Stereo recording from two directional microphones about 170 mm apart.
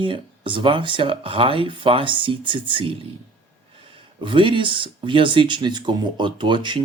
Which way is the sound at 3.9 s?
30° right (ahead or behind).